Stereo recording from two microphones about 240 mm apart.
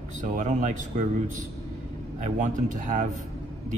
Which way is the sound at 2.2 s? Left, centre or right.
Right.